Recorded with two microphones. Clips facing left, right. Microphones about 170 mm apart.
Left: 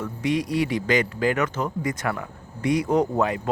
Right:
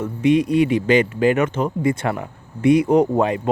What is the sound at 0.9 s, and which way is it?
Speech, 25° right (ahead or behind).